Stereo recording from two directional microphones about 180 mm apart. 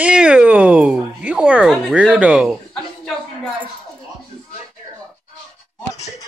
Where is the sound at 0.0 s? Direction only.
5° right (ahead or behind).